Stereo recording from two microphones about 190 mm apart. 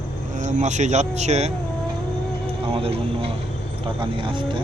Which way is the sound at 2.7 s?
30° right (ahead or behind).